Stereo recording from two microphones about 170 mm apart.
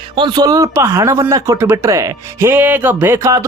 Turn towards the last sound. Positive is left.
turn(degrees=-15)  # may be behind; listen again after turning